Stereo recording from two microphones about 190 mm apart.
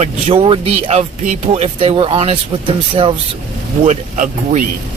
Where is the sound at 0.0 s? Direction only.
35° right (ahead or behind).